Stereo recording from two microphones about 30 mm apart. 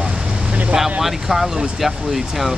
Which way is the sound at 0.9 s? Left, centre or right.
Centre.